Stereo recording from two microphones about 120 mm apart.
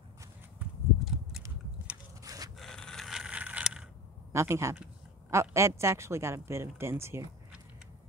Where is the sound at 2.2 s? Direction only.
30° right (ahead or behind).